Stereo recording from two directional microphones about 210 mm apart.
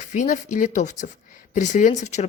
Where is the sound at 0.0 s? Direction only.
35° left (ahead or behind).